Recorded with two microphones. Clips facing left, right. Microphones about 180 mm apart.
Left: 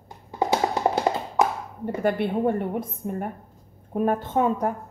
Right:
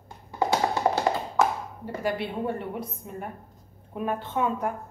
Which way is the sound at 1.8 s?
55° left (ahead or behind).